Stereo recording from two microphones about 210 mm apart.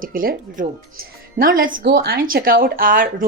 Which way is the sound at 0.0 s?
40° right (ahead or behind).